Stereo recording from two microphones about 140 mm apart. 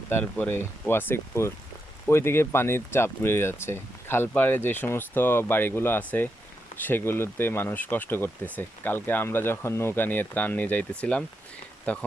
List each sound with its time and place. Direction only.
0.1 s speech: 10° left (ahead or behind)